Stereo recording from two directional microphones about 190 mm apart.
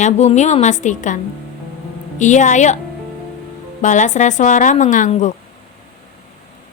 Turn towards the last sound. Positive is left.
turn(degrees=40)  # may be behind; listen again after turning